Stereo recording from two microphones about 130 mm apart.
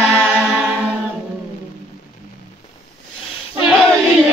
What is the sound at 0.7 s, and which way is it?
A capella, 10° right (ahead or behind).